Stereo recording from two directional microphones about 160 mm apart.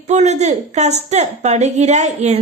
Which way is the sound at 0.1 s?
45° right (ahead or behind).